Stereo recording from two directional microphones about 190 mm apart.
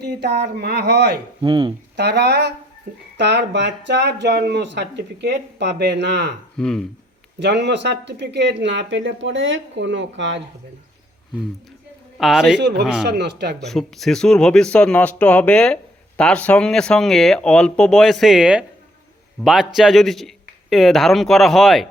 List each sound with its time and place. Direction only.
0.0 s speech: 60° right (ahead or behind)
1.4 s speech: 25° right (ahead or behind)
2.0 s speech: 60° right (ahead or behind)
6.6 s speech: 5° left (ahead or behind)
7.3 s speech: 65° right (ahead or behind)
12.1 s a man's voice: centre (ahead or behind)
12.5 s speech: 60° right (ahead or behind)
13.7 s speech: centre (ahead or behind)